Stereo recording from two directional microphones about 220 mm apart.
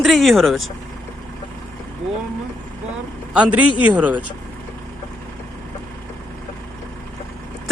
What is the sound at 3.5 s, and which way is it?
Speech, 90° right.